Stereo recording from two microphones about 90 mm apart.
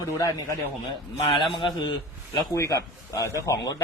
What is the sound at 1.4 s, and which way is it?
Speech, 65° left (ahead or behind).